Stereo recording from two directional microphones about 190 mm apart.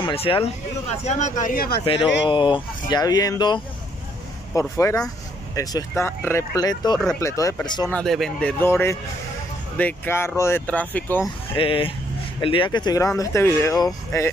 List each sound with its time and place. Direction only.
0.0 s speech: 30° left (ahead or behind); by 1.8 s 50° left (ahead or behind)
2.2 s speech: 25° left (ahead or behind)
7.9 s speech: centre (ahead or behind)
11.5 s speech: 30° left (ahead or behind)